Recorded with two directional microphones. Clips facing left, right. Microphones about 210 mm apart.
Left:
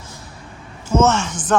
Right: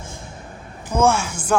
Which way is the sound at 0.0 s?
50° right (ahead or behind).